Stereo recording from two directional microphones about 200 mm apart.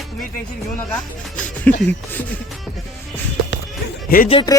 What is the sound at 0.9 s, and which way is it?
Music, 5° left (ahead or behind).